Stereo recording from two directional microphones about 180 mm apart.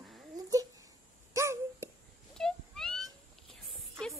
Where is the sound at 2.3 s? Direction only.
5° left (ahead or behind).